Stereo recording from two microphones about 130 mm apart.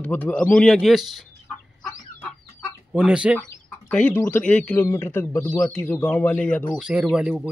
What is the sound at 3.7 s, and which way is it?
Bird, 10° left (ahead or behind).